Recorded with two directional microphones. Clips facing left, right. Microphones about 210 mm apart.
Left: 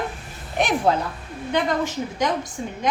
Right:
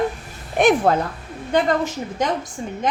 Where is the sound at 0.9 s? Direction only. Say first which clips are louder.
Right 2 dB; 55° right (ahead or behind).